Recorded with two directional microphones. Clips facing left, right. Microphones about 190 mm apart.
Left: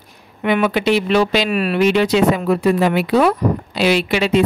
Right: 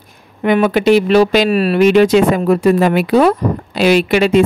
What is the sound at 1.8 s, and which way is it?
Speech, 45° right (ahead or behind).